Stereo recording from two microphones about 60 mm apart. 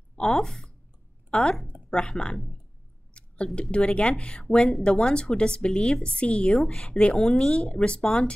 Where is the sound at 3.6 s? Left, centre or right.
Centre.